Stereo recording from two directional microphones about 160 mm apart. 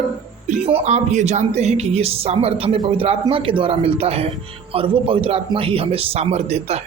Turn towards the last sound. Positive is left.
turn(degrees=-40)  # may be behind; listen again after turning